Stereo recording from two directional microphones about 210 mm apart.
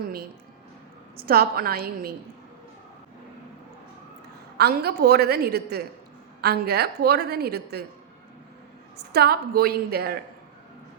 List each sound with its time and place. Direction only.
1.2 s a woman's voice: 45° right (ahead or behind)
4.5 s a woman's voice: 50° right (ahead or behind)
9.0 s a woman's voice: 50° right (ahead or behind)